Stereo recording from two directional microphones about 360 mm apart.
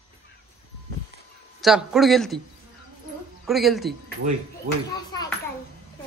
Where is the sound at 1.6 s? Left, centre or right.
Centre.